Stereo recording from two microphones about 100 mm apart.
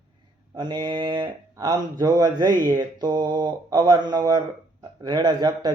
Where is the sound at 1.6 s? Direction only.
40° right (ahead or behind).